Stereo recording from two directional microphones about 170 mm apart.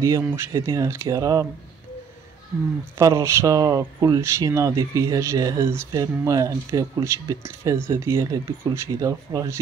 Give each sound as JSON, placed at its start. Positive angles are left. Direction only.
{"t": 0.0, "sound": "speech", "side_deg": -15}
{"t": 3.0, "sound": "speech", "side_deg": -15}